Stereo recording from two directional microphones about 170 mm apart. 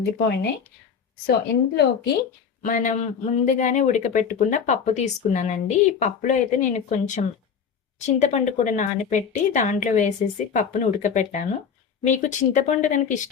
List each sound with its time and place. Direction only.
0.0 s a woman's voice: 75° left (ahead or behind)
2.6 s speech: 50° left (ahead or behind)